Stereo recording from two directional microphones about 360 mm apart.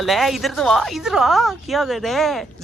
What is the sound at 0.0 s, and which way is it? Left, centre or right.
Speech, centre.